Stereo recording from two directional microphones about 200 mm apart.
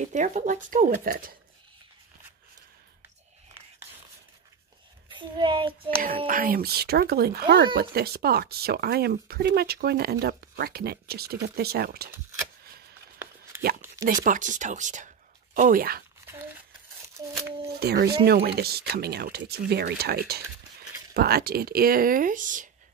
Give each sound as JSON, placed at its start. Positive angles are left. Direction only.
{"t": 0.1, "sound": "speech", "side_deg": -35}
{"t": 5.1, "sound": "speech", "side_deg": -25}
{"t": 5.9, "sound": "speech", "side_deg": -45}
{"t": 14.0, "sound": "speech", "side_deg": -40}
{"t": 16.3, "sound": "crumpling", "side_deg": -10}
{"t": 17.7, "sound": "speech", "side_deg": -50}